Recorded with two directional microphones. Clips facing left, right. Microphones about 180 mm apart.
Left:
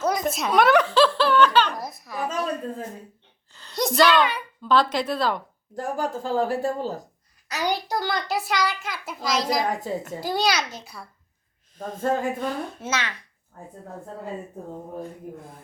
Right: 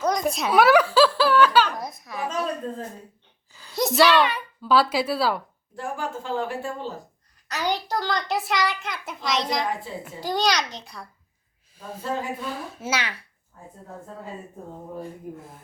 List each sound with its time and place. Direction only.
0.0 s speech: 5° left (ahead or behind)
3.5 s a child's voice: 5° right (ahead or behind)
5.7 s speech: 40° left (ahead or behind)
7.4 s a child's voice: 10° left (ahead or behind)
9.6 s speech: 45° left (ahead or behind)
10.2 s a child's voice: 10° left (ahead or behind)
11.9 s speech: 50° left (ahead or behind)
12.5 s a woman's voice: centre (ahead or behind)